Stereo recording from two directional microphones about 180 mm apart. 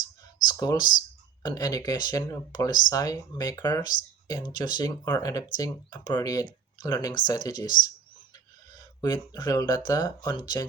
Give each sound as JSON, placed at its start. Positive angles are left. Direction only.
{"t": 0.4, "sound": "speech", "side_deg": 20}
{"t": 8.7, "sound": "speech", "side_deg": 20}